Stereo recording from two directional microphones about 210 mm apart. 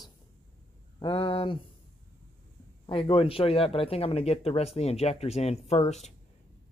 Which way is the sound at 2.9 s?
25° left (ahead or behind).